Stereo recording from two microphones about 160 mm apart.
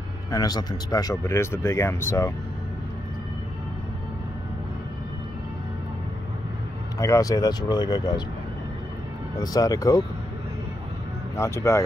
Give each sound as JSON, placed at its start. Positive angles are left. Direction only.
{"t": 0.3, "sound": "speech", "side_deg": 25}
{"t": 7.0, "sound": "speech", "side_deg": 20}
{"t": 9.4, "sound": "speech", "side_deg": 20}
{"t": 11.3, "sound": "speech", "side_deg": 20}